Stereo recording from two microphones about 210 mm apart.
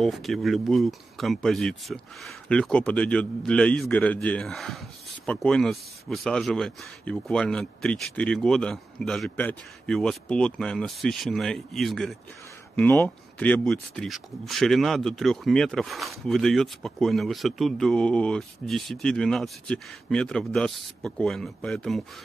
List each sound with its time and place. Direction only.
0.0 s speech: centre (ahead or behind)